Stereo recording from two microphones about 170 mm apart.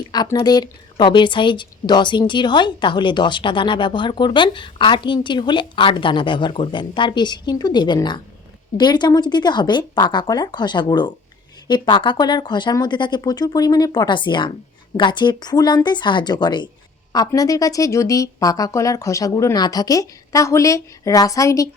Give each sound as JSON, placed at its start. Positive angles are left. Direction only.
{"t": 0.1, "sound": "a woman's voice", "side_deg": 25}